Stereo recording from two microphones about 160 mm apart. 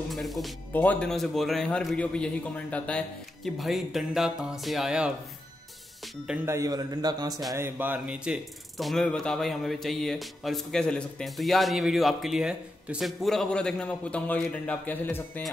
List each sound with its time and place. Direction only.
0.1 s a man's voice: centre (ahead or behind)
6.2 s a man's voice: 10° right (ahead or behind)
7.5 s a man's voice: 15° right (ahead or behind); by 15.4 s 10° left (ahead or behind)